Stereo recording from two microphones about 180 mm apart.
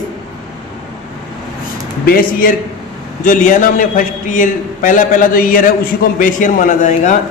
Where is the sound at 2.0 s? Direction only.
55° left (ahead or behind).